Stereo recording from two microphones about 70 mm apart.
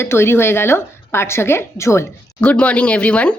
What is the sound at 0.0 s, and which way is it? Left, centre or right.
Speech, left.